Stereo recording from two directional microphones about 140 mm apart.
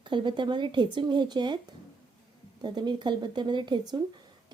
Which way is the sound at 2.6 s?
35° right (ahead or behind).